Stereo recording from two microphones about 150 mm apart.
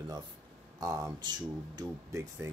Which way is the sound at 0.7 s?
25° right (ahead or behind).